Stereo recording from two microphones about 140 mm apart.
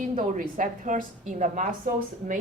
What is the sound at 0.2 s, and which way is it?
A woman's voice, 70° right (ahead or behind).